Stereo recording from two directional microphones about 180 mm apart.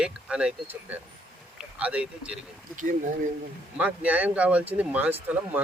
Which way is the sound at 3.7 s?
10° right (ahead or behind).